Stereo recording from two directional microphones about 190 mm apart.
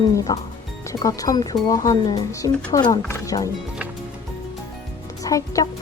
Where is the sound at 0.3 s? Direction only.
20° left (ahead or behind).